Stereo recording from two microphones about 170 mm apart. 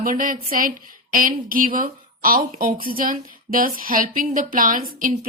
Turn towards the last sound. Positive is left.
turn(degrees=-55)  # may be behind; listen again after turning